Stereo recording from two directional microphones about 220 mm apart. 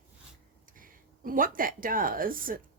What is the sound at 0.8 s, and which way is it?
Speech, 40° right (ahead or behind).